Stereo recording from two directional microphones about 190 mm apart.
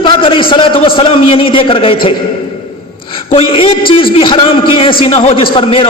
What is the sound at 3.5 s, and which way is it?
A man's voice, 30° left (ahead or behind).